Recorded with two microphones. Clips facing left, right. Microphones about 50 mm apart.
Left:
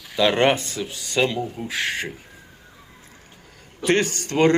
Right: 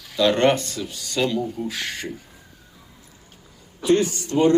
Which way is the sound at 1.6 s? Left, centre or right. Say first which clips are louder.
Right 3 dB; left.